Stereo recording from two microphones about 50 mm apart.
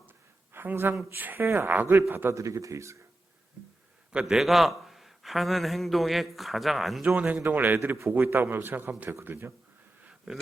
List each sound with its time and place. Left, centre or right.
0.5 s speech: right
1.4 s a man's voice: right
2.3 s speech: right
4.3 s a man's voice: centre
7.0 s a man's voice: right
10.3 s speech: centre